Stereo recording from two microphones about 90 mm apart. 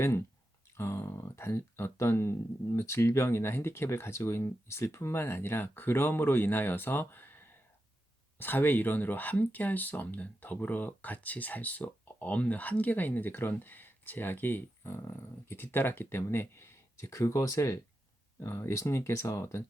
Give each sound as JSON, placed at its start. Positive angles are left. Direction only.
{"t": 0.0, "sound": "speech", "side_deg": 30}